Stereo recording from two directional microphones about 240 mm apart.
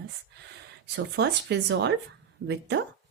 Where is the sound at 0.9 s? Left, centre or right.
Right.